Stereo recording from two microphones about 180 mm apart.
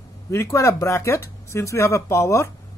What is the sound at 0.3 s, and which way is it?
A man's voice, 15° left (ahead or behind).